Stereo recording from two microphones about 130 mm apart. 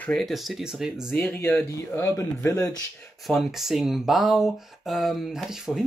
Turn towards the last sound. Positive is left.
turn(degrees=-5)  # may be behind; listen again after turning